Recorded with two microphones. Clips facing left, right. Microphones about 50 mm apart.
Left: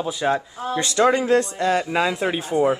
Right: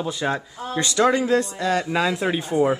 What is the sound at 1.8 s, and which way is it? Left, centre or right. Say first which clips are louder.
Speech: left 1 dB; centre.